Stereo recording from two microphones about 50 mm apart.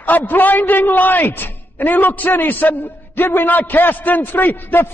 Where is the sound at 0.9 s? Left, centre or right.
Left.